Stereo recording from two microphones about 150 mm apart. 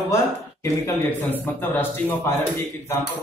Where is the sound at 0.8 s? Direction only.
15° left (ahead or behind).